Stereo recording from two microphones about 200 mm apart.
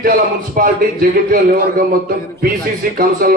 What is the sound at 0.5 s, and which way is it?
A man's voice, 45° right (ahead or behind).